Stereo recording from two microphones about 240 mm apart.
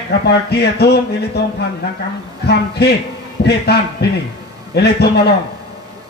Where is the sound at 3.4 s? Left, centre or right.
Left.